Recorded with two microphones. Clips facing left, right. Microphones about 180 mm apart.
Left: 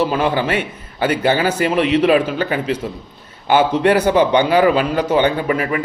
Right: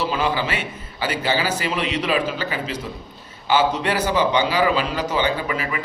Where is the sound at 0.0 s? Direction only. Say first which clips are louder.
Left 5 dB; 55° left (ahead or behind).